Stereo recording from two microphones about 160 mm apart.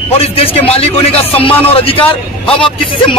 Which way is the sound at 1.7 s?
35° left (ahead or behind).